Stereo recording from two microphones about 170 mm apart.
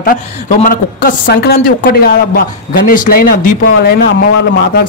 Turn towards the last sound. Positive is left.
turn(degrees=60)  # may be behind; listen again after turning